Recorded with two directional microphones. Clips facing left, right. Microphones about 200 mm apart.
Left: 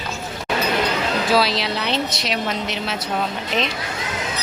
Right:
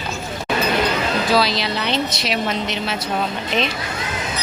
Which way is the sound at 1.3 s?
5° left (ahead or behind).